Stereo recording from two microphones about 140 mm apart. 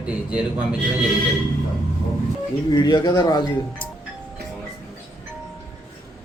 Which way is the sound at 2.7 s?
30° left (ahead or behind).